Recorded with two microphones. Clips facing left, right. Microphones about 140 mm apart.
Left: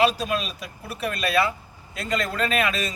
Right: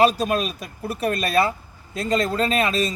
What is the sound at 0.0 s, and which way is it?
Speech, 45° right (ahead or behind).